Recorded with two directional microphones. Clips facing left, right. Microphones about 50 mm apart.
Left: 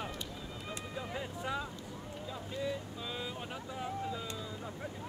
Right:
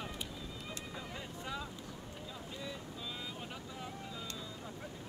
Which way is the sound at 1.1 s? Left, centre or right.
Centre.